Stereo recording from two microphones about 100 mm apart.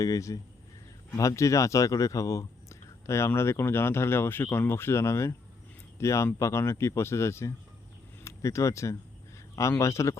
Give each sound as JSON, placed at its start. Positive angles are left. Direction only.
{"t": 0.0, "sound": "speech", "side_deg": 35}